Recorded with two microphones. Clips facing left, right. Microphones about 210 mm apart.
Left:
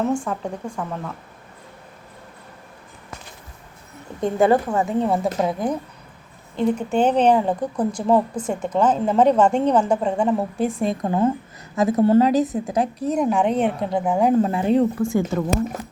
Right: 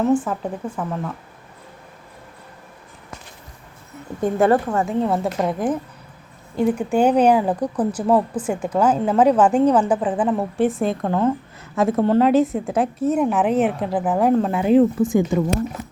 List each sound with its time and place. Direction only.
0.0 s a woman's voice: 5° right (ahead or behind)
4.2 s a woman's voice: centre (ahead or behind)
11.0 s a woman's voice: 10° left (ahead or behind)
15.0 s speech: 15° right (ahead or behind)